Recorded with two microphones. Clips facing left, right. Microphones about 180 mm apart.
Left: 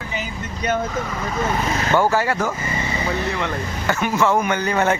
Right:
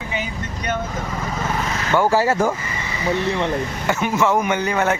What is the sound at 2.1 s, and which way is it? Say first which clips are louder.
Speech: right 3 dB; 30° right (ahead or behind).